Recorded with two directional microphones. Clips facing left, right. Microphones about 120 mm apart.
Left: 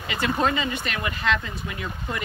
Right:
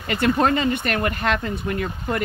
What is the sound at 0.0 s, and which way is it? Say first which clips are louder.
Speech: right 5 dB; 50° right (ahead or behind).